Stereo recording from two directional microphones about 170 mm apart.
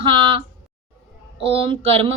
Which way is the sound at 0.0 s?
30° right (ahead or behind).